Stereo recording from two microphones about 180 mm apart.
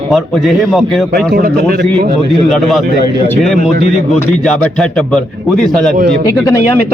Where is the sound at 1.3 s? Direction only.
55° right (ahead or behind).